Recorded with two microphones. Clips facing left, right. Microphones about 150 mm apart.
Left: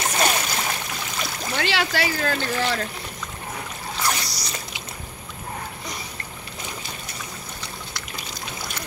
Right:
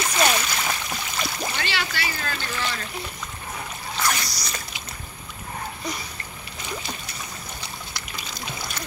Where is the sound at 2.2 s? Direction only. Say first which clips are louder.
Left 6 dB; 50° left (ahead or behind).